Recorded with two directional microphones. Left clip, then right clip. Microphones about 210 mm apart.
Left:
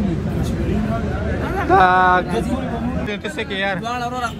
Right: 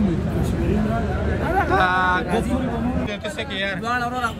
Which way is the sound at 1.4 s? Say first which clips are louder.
Right 4 dB; 45° right (ahead or behind).